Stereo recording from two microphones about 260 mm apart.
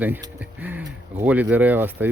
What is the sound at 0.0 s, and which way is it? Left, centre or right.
Speech, centre.